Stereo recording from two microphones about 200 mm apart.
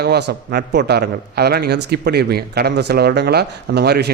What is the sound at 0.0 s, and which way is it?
A man's voice, 55° right (ahead or behind).